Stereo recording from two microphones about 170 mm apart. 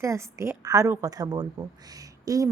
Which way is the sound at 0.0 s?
15° right (ahead or behind).